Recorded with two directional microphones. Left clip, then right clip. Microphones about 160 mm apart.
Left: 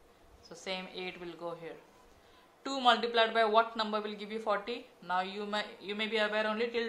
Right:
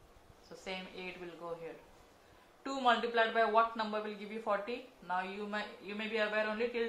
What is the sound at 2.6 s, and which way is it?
Speech, 45° left (ahead or behind).